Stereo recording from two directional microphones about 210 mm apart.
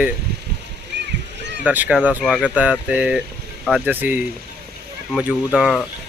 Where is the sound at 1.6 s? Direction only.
5° right (ahead or behind).